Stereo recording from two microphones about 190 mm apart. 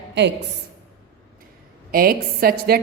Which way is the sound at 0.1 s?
65° right (ahead or behind).